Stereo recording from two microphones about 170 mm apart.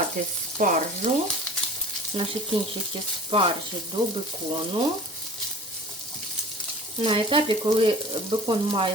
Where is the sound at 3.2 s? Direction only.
30° right (ahead or behind).